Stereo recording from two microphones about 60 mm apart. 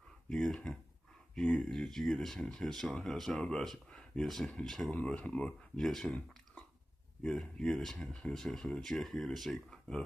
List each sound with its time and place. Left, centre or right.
0.3 s speech: centre
5.0 s speech: centre
5.8 s speech: centre
7.2 s speech: centre